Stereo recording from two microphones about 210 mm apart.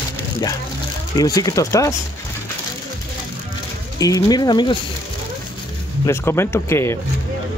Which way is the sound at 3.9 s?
15° left (ahead or behind).